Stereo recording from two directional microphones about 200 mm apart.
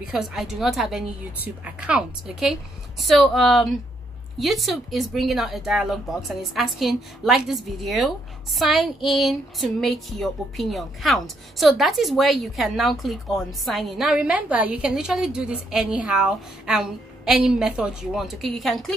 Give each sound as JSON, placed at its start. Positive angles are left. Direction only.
{"t": 0.1, "sound": "a woman's voice", "side_deg": 0}